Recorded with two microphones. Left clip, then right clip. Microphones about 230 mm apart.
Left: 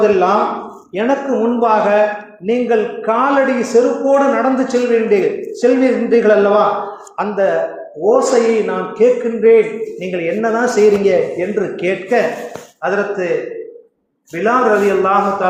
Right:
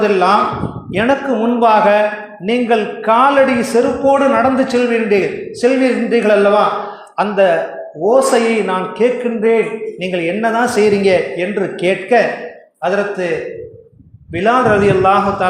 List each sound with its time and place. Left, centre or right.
0.0 s a man's voice: right
14.4 s a man's voice: right